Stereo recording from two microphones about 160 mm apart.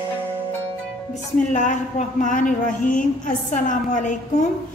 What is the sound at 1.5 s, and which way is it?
A woman's voice, 50° left (ahead or behind).